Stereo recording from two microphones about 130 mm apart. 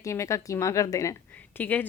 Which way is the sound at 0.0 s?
25° left (ahead or behind).